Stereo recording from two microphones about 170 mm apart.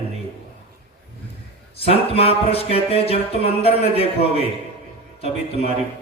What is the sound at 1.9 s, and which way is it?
Music, 35° left (ahead or behind).